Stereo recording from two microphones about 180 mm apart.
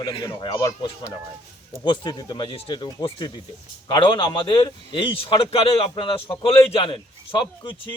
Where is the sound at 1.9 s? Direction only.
25° left (ahead or behind).